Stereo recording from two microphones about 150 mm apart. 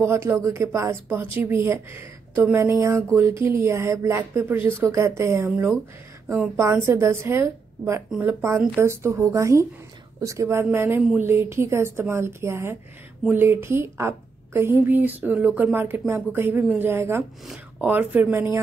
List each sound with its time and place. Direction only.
0.0 s a woman's voice: 15° right (ahead or behind)